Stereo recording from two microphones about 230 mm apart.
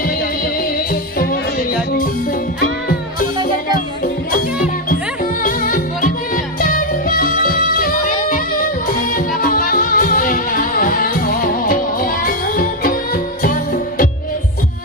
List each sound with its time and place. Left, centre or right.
1.1 s music: left
9.1 s music: left